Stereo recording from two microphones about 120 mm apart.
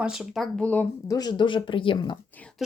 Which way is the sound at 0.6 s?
15° left (ahead or behind).